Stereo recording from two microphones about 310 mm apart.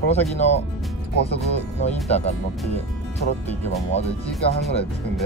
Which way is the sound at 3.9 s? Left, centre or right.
Centre.